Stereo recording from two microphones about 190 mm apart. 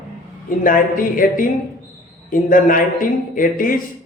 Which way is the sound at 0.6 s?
45° left (ahead or behind).